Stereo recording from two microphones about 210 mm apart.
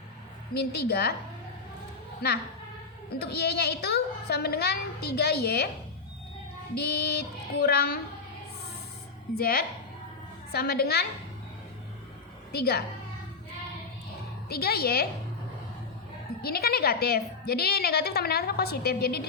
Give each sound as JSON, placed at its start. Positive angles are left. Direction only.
{"t": 0.5, "sound": "a woman's voice", "side_deg": 50}
{"t": 3.2, "sound": "a woman's voice", "side_deg": 50}
{"t": 6.7, "sound": "a woman's voice", "side_deg": 50}
{"t": 9.4, "sound": "a woman's voice", "side_deg": 45}
{"t": 12.5, "sound": "a woman's voice", "side_deg": 50}
{"t": 14.5, "sound": "a woman's voice", "side_deg": 50}
{"t": 16.4, "sound": "a woman's voice", "side_deg": 50}